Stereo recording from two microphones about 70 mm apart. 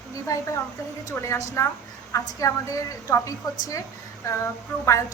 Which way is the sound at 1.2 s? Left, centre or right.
Left.